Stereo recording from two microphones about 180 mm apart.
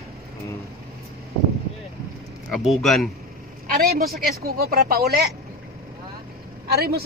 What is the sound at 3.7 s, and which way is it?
Speech, 55° right (ahead or behind).